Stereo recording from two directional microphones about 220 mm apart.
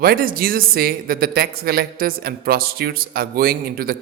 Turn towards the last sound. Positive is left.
turn(degrees=-40)  # may be behind; listen again after turning